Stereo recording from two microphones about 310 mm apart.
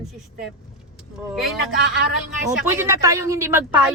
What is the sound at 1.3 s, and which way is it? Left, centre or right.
A man's voice, centre.